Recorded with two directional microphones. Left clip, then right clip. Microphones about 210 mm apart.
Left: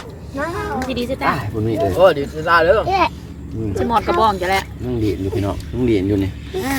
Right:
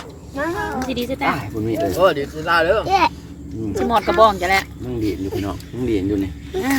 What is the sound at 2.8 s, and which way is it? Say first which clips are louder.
Speech: even; 45° right (ahead or behind).